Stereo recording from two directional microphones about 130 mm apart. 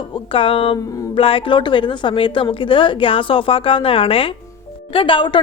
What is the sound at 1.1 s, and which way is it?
A woman's voice, 45° left (ahead or behind).